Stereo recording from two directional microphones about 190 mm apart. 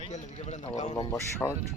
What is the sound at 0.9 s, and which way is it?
Speech, 20° left (ahead or behind).